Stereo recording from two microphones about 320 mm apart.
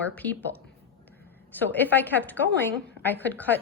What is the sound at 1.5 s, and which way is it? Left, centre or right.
A woman's voice, centre.